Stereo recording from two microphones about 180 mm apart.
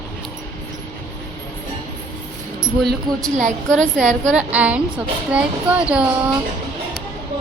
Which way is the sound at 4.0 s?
40° right (ahead or behind).